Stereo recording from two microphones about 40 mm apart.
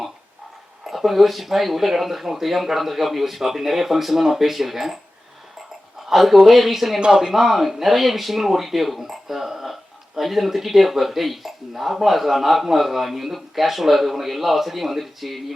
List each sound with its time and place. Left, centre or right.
0.9 s speech: centre
6.1 s speech: centre
7.0 s speech: centre
7.3 s speech: centre